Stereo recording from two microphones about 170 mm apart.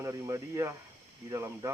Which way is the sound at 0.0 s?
20° right (ahead or behind).